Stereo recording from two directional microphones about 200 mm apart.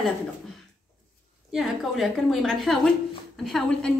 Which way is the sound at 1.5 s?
Centre (ahead or behind).